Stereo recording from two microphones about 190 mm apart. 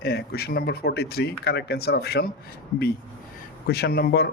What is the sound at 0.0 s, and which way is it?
Speech, 55° left (ahead or behind).